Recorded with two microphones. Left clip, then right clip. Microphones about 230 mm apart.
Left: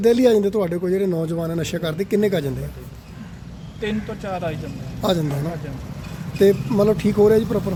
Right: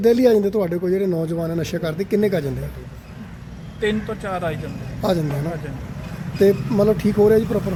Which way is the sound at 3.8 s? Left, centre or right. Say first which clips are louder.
Right 4 dB; centre.